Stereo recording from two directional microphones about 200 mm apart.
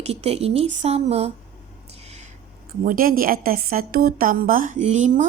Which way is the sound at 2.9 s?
45° right (ahead or behind).